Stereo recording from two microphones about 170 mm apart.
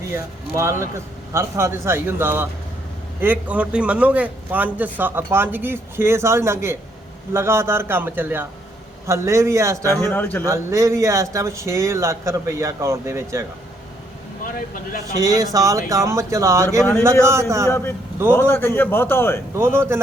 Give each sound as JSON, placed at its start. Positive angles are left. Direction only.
{"t": 0.1, "sound": "a man's voice", "side_deg": -15}
{"t": 10.0, "sound": "a man's voice", "side_deg": 10}
{"t": 10.4, "sound": "a man's voice", "side_deg": -15}
{"t": 15.1, "sound": "a man's voice", "side_deg": -20}
{"t": 17.7, "sound": "a man's voice", "side_deg": 15}
{"t": 19.5, "sound": "a man's voice", "side_deg": -15}